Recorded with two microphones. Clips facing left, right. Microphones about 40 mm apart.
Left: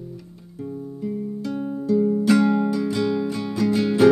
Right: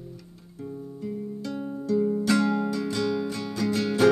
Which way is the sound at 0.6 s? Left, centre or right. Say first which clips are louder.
Left 5 dB; centre.